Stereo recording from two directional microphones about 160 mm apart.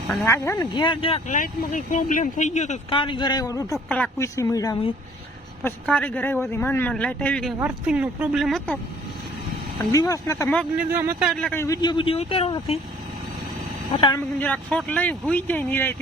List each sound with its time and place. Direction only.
0.3 s speech: 15° left (ahead or behind); by 1.2 s 30° left (ahead or behind)
1.3 s speech: 55° left (ahead or behind)
2.9 s speech: 30° left (ahead or behind)
3.8 s speech: 10° left (ahead or behind)
4.4 s speech: 20° left (ahead or behind)
5.6 s speech: 10° left (ahead or behind)
7.6 s speech: 10° right (ahead or behind)
9.9 s speech: 20° left (ahead or behind)
10.9 s speech: 15° right (ahead or behind)
11.2 s speech: centre (ahead or behind)
11.5 s speech: 20° left (ahead or behind)
13.9 s speech: 30° left (ahead or behind)
14.2 s speech: 10° left (ahead or behind)